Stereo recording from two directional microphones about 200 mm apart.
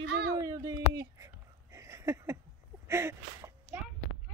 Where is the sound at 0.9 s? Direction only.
15° right (ahead or behind).